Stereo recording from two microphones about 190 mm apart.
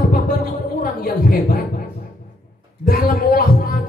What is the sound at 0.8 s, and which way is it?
Speech, 50° left (ahead or behind).